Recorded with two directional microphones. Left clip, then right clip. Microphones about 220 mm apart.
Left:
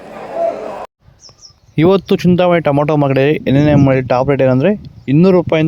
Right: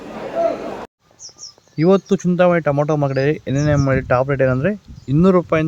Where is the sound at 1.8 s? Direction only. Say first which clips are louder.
Left 4 dB; 35° left (ahead or behind).